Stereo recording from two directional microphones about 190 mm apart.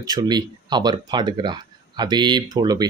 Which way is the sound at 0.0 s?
20° right (ahead or behind).